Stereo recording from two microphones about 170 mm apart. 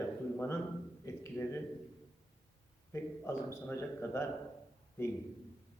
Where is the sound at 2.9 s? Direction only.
15° left (ahead or behind).